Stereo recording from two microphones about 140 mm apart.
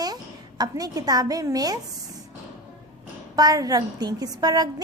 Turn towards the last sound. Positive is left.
turn(degrees=-25)  # may be behind; listen again after turning